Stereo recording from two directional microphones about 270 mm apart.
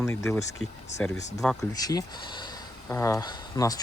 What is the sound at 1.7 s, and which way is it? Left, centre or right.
Speech, centre.